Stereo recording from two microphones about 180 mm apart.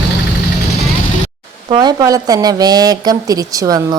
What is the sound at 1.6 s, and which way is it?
A woman's voice, 25° right (ahead or behind).